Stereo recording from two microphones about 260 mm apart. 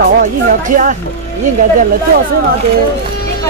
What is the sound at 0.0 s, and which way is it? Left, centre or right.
Speech, right.